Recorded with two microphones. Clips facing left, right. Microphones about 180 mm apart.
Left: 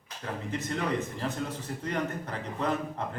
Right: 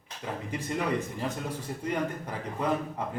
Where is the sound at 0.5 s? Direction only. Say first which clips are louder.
Right 1 dB; 10° right (ahead or behind).